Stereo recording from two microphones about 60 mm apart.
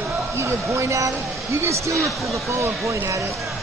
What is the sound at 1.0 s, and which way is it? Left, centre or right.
Speech, right.